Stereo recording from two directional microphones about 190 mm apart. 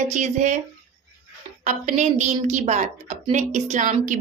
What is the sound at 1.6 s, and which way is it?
Speech, 40° right (ahead or behind).